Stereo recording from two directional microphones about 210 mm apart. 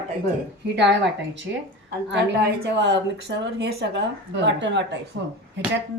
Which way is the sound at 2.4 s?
55° right (ahead or behind).